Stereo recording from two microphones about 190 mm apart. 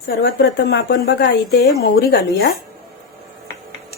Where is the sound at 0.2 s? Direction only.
65° left (ahead or behind).